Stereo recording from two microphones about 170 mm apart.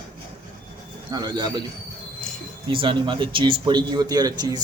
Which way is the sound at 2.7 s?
30° right (ahead or behind).